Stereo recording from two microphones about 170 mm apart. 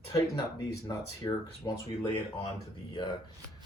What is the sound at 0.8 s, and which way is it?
Speech, 25° left (ahead or behind).